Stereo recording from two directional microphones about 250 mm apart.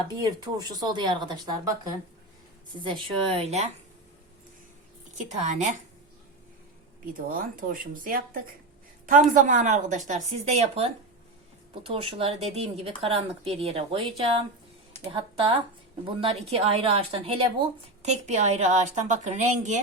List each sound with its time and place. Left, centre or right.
0.3 s speech: centre
2.7 s speech: centre
5.1 s speech: right
7.0 s speech: right